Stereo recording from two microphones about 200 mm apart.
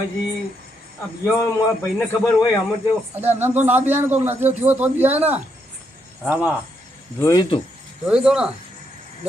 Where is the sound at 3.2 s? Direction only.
10° right (ahead or behind).